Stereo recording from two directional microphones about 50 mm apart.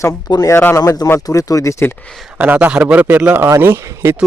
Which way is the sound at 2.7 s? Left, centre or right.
Right.